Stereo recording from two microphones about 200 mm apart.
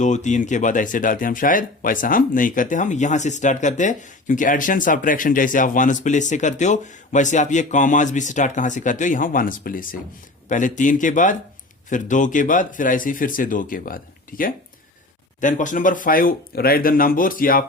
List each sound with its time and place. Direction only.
0.0 s speech: 35° left (ahead or behind)